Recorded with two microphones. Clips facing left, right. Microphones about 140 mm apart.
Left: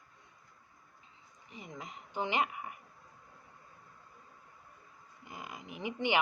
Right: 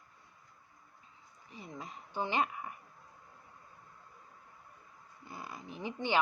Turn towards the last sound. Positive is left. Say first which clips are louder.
# left 1 dB
turn(degrees=15)  # may be behind; listen again after turning